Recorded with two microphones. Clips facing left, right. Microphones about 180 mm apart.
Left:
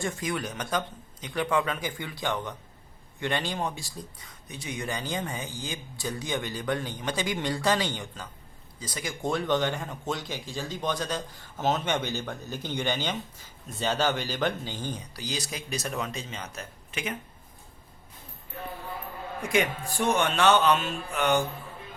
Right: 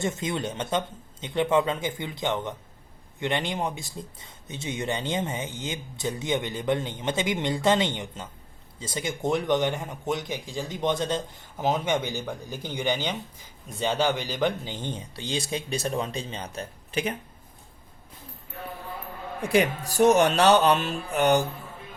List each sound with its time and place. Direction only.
0.0 s speech: 25° right (ahead or behind)
19.4 s speech: 35° right (ahead or behind)